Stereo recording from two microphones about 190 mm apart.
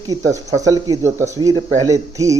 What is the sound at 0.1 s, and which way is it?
Speech, 15° right (ahead or behind).